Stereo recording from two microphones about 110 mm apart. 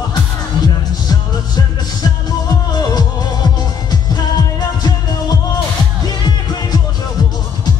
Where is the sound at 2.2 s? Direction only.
35° left (ahead or behind).